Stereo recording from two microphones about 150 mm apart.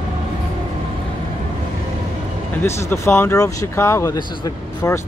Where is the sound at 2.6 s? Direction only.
15° left (ahead or behind).